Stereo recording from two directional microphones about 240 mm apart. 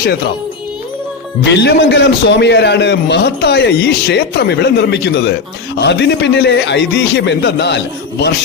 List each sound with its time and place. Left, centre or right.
1.5 s a man's voice: left